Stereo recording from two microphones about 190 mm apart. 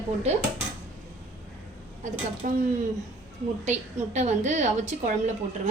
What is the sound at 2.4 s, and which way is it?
Speech, 45° right (ahead or behind).